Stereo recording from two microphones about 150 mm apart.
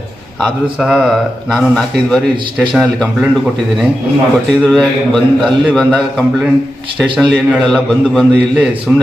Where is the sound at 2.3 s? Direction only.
30° right (ahead or behind).